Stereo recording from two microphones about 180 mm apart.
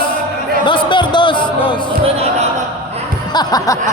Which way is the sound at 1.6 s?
25° left (ahead or behind).